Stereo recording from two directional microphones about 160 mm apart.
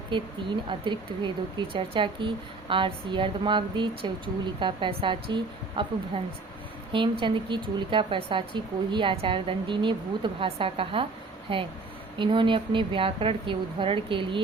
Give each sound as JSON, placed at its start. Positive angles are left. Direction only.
{"t": 0.1, "sound": "speech", "side_deg": -30}
{"t": 6.9, "sound": "speech", "side_deg": -30}